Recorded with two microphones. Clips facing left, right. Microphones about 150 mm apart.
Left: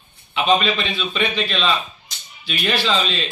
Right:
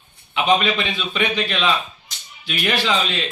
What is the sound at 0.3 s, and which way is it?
A man's voice, 15° right (ahead or behind).